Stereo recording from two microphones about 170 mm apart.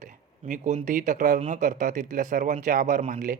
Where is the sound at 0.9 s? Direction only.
50° right (ahead or behind).